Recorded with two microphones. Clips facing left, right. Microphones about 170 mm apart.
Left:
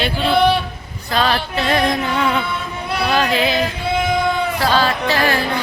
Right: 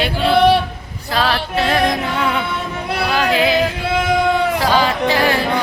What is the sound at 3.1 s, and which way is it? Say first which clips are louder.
Music: right 1 dB; 10° right (ahead or behind).